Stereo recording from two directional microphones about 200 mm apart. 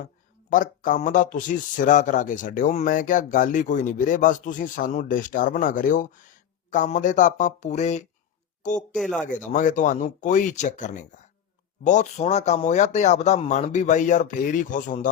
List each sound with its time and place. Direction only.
0.5 s speech: 40° left (ahead or behind)
9.0 s speech: centre (ahead or behind)
9.5 s speech: 40° left (ahead or behind)